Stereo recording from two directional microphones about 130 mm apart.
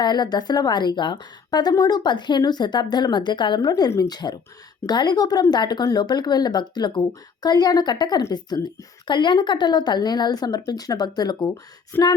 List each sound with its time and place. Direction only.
0.0 s speech: 30° left (ahead or behind)
11.9 s female singing: 15° left (ahead or behind)